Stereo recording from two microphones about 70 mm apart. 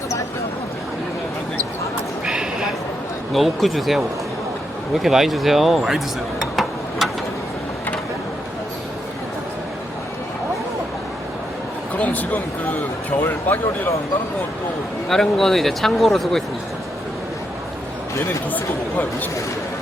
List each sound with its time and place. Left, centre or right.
2.2 s a sound: centre
3.3 s speech: centre
6.4 s a sound: centre
11.9 s speech: left
13.2 s speech: left
15.1 s speech: centre
18.5 s speech: left